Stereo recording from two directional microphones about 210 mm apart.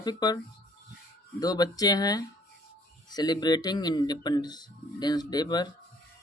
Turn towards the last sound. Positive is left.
turn(degrees=20)  # may be behind; listen again after turning